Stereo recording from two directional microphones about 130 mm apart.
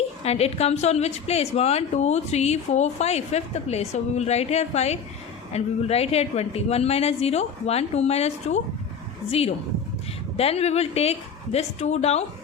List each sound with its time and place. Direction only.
0.3 s a woman's voice: 55° left (ahead or behind)